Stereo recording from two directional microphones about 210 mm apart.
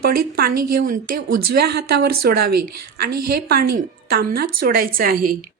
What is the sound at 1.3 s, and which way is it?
A woman's voice, 50° right (ahead or behind).